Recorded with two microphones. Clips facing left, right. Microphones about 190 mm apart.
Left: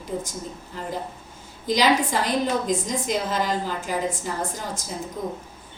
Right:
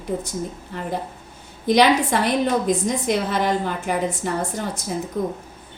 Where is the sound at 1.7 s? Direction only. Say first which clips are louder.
Right 4 dB; 60° right (ahead or behind).